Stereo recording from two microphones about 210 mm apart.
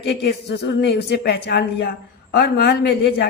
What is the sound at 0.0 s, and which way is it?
A man's voice, 55° left (ahead or behind).